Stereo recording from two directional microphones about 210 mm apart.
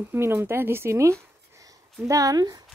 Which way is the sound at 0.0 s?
10° right (ahead or behind).